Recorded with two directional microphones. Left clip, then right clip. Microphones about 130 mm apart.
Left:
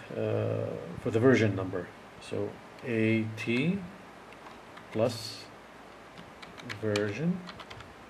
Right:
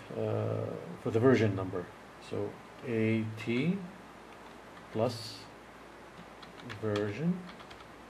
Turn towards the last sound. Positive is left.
turn(degrees=10)  # may be behind; listen again after turning